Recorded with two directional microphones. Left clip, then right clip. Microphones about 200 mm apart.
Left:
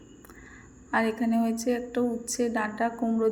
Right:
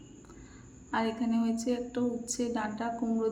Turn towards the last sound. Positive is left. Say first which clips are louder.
# left 6 dB
turn(degrees=10)  # may be behind; listen again after turning